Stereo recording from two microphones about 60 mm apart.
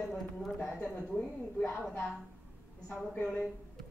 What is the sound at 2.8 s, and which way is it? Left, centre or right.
Speech, left.